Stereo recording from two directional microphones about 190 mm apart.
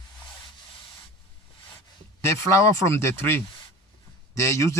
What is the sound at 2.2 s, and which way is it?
A man's voice, 15° left (ahead or behind).